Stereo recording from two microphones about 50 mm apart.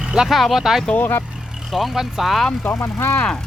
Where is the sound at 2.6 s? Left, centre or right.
Left.